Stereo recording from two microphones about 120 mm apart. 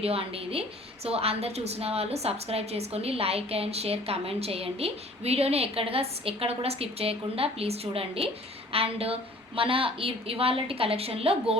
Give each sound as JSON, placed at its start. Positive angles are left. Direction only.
{"t": 0.0, "sound": "a woman's voice", "side_deg": -55}